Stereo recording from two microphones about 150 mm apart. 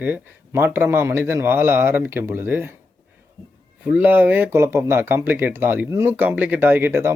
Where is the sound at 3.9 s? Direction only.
10° right (ahead or behind).